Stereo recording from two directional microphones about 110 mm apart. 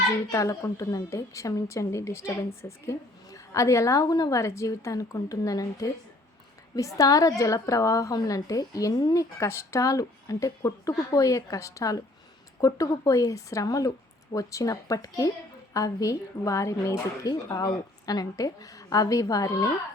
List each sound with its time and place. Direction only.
0.3 s a woman's voice: 25° left (ahead or behind)